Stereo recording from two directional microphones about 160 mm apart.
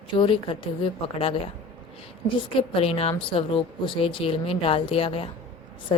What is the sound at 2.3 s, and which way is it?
Speech, 35° left (ahead or behind).